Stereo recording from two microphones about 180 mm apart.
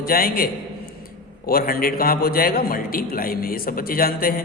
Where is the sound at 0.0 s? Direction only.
55° left (ahead or behind).